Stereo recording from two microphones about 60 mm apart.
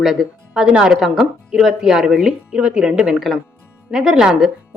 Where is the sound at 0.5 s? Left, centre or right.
Centre.